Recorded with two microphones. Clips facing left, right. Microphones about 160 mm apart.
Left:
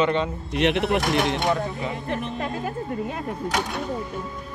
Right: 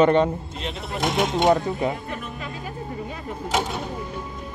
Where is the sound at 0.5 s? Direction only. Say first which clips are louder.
Left 10 dB; 80° left.